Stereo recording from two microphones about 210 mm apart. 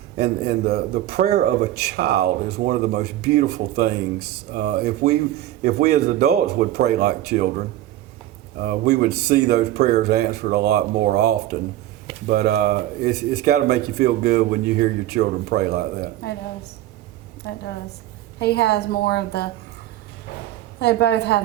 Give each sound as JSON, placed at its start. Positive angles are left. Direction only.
{"t": 0.2, "sound": "a man's voice", "side_deg": -50}
{"t": 8.5, "sound": "a man's voice", "side_deg": -50}
{"t": 17.4, "sound": "a woman's voice", "side_deg": 55}
{"t": 20.7, "sound": "a woman's voice", "side_deg": 55}